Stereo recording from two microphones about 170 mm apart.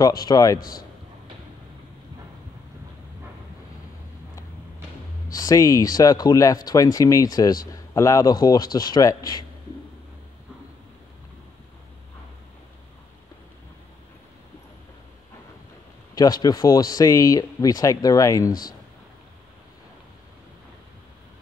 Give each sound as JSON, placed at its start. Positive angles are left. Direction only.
{"t": 0.0, "sound": "speech", "side_deg": 20}
{"t": 0.6, "sound": "a man's voice", "side_deg": 55}
{"t": 5.3, "sound": "speech", "side_deg": 20}
{"t": 16.2, "sound": "speech", "side_deg": 25}